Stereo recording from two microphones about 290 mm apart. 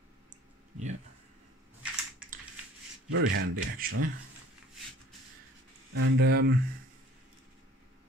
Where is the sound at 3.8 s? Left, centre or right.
Right.